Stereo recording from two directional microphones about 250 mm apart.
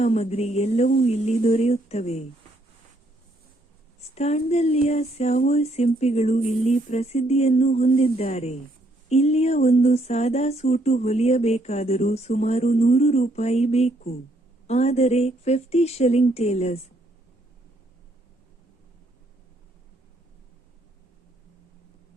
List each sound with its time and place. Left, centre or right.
0.0 s speech: left
4.1 s speech: left